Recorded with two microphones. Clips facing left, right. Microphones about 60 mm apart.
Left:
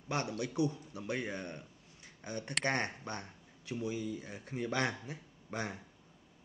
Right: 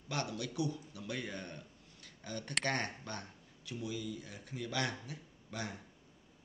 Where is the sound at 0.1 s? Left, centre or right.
Left.